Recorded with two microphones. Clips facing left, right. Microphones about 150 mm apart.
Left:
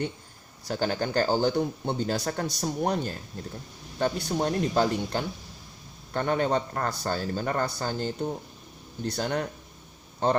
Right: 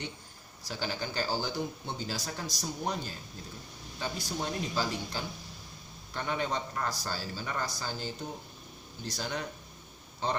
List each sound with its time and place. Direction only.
0.7 s a man's voice: 55° left (ahead or behind)